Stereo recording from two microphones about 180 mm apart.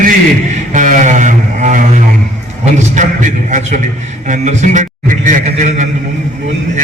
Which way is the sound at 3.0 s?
45° right (ahead or behind).